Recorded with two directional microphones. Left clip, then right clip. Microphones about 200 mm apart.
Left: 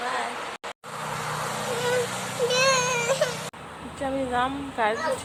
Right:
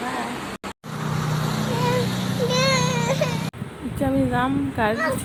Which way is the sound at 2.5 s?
15° left (ahead or behind).